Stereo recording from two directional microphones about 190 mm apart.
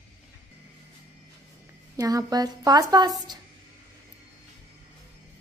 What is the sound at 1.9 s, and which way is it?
A woman's voice, 20° right (ahead or behind).